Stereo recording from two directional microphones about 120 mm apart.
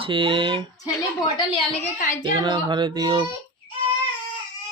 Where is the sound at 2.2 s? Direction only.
40° right (ahead or behind).